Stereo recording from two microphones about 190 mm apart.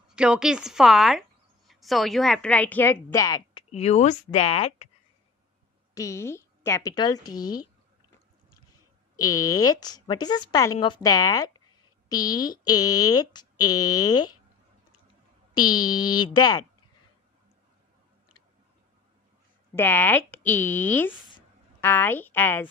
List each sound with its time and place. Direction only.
0.1 s a woman's voice: 5° right (ahead or behind); by 3.6 s 20° left (ahead or behind)
3.7 s speech: 35° left (ahead or behind)
5.9 s speech: 15° left (ahead or behind)
9.1 s speech: 20° left (ahead or behind)
15.5 s speech: 20° left (ahead or behind)
19.7 s a woman's voice: 10° left (ahead or behind)